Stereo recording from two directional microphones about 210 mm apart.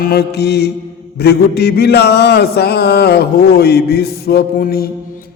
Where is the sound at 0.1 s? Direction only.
50° left (ahead or behind).